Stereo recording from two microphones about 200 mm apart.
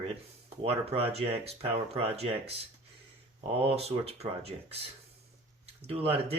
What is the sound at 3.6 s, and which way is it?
Speech, 30° right (ahead or behind).